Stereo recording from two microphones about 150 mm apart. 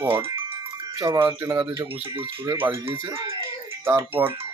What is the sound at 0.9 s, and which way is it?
Speech, 20° right (ahead or behind).